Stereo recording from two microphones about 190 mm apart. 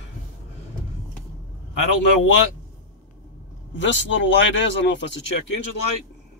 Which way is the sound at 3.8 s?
75° left (ahead or behind).